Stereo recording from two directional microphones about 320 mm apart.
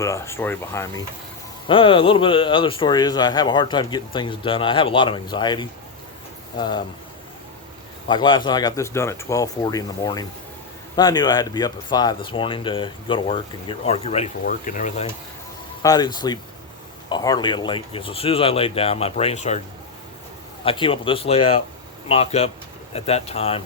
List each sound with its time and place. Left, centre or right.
0.0 s speech: centre
8.0 s speech: centre
20.7 s speech: centre